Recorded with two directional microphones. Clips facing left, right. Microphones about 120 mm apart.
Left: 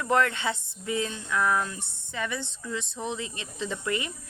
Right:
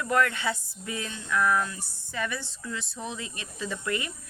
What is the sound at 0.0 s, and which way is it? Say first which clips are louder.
Speech: left 1 dB; 25° left (ahead or behind).